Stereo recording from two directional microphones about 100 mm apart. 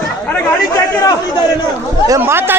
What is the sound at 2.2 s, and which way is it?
Speech, 20° right (ahead or behind).